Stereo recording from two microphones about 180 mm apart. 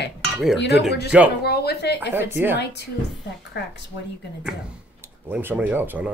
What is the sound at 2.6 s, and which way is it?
Speech, 70° left (ahead or behind).